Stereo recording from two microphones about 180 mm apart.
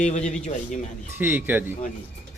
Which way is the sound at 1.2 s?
10° right (ahead or behind).